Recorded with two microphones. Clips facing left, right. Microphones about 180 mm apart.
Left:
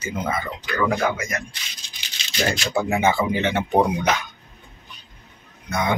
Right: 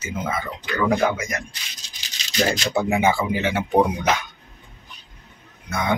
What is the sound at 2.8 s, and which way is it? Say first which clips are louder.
Speech: right 1 dB; 15° right (ahead or behind).